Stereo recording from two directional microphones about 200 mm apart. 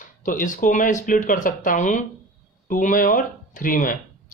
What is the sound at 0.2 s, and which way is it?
Speech, 40° left (ahead or behind).